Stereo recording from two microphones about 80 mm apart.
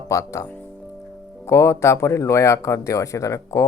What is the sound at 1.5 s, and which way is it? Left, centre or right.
Speech, left.